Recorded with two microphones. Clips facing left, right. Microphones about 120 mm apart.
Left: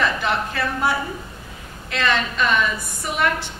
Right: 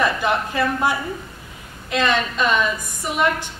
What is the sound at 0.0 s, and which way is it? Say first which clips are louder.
A woman's voice: right 2 dB; 15° right (ahead or behind).